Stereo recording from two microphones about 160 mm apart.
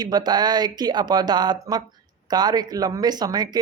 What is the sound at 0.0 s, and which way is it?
Speech, 25° right (ahead or behind).